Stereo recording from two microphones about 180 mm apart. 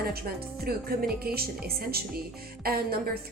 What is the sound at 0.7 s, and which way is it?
A woman's voice, 60° right (ahead or behind).